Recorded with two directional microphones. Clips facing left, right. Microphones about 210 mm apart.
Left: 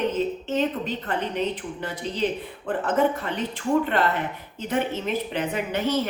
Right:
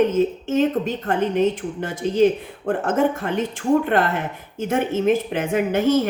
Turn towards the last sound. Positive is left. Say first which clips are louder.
# right 7 dB
turn(degrees=-45)  # may be behind; listen again after turning